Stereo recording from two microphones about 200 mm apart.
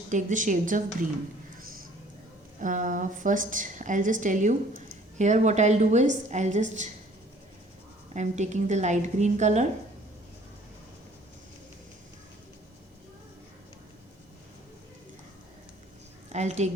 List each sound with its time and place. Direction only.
0.1 s a woman's voice: 40° right (ahead or behind)
2.6 s a woman's voice: 40° right (ahead or behind)
8.1 s a woman's voice: 35° right (ahead or behind)
16.3 s a woman's voice: 35° right (ahead or behind)